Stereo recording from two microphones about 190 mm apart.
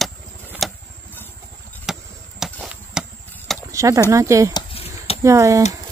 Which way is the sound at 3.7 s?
15° right (ahead or behind).